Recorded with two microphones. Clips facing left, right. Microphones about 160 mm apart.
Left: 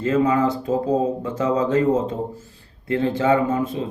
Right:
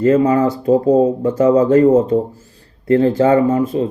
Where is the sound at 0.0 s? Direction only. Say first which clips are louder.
Right 6 dB; 40° right (ahead or behind).